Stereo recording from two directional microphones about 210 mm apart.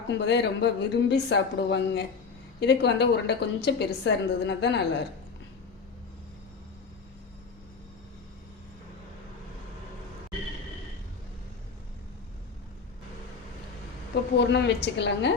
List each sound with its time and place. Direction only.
0.1 s a woman's voice: 55° left (ahead or behind)
14.3 s speech: 55° left (ahead or behind)